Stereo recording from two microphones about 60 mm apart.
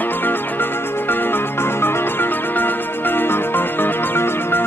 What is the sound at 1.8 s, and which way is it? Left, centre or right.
Music, left.